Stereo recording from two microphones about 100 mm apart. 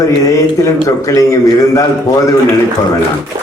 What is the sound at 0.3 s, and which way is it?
A man's voice, 35° left (ahead or behind).